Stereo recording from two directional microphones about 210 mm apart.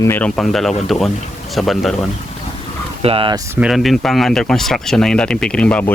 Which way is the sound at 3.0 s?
25° right (ahead or behind).